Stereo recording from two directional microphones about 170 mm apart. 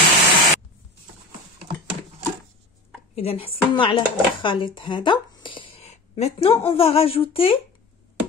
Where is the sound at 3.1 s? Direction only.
35° left (ahead or behind).